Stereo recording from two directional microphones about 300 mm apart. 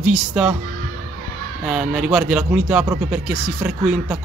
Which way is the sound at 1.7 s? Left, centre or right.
Centre.